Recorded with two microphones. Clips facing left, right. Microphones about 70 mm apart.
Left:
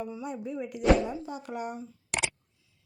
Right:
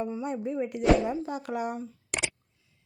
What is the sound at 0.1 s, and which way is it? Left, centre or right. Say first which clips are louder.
Speech: right 4 dB; right.